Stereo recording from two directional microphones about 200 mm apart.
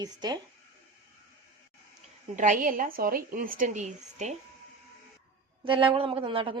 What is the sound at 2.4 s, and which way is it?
A woman's voice, 40° right (ahead or behind).